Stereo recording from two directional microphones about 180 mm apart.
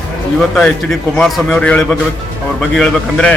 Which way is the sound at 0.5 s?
5° left (ahead or behind).